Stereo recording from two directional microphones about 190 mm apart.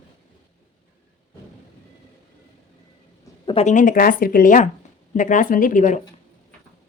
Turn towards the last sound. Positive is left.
turn(degrees=40)  # may be behind; listen again after turning